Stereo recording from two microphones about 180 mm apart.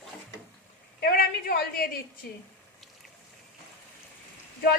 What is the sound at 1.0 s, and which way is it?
Speech, 55° left (ahead or behind).